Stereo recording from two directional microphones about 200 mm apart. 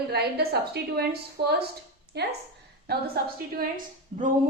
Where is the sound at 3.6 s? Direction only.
45° right (ahead or behind).